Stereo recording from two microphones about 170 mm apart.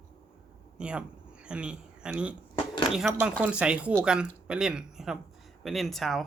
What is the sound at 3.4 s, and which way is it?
Speech, 5° right (ahead or behind).